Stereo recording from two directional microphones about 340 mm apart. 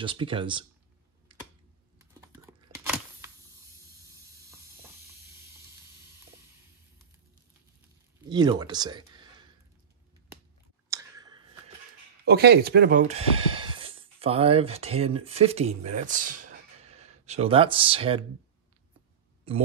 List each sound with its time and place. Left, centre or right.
0.0 s speech: centre
2.0 s typing: centre
8.3 s speech: centre
10.9 s a sound: centre
12.3 s speech: right